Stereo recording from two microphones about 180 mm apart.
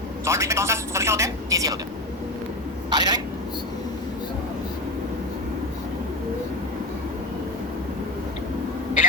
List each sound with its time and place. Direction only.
0.3 s speech: 15° right (ahead or behind)
2.9 s speech: 20° right (ahead or behind)